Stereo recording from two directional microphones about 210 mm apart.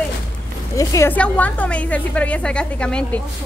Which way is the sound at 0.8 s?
15° left (ahead or behind).